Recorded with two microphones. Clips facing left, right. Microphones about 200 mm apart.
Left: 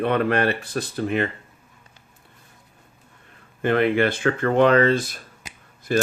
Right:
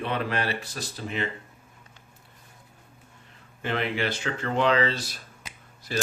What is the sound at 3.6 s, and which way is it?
Speech, 55° left (ahead or behind).